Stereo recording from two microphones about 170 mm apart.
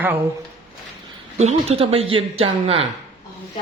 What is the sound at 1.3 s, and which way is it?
Speech, 40° right (ahead or behind).